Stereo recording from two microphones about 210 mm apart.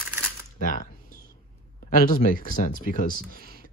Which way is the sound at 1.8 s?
40° left (ahead or behind).